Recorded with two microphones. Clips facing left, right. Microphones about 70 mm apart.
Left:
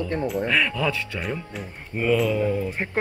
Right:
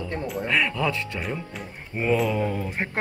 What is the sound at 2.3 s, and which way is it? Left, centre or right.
Mantra, right.